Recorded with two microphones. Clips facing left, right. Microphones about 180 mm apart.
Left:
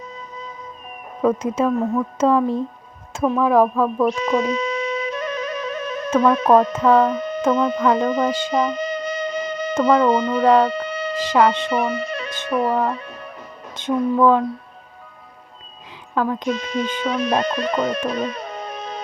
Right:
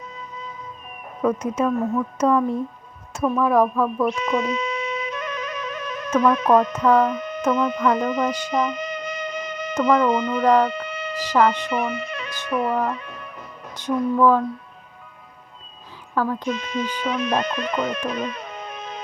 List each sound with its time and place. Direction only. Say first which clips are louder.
0.2 s music: left 1 dB; 40° left (ahead or behind)
1.6 s speech: left 2 dB; 35° left (ahead or behind)
13.7 s speech: left 2 dB; 25° left (ahead or behind)
16.1 s speech: left 2 dB; 20° left (ahead or behind)
16.5 s speech: left 3 dB; 35° left (ahead or behind)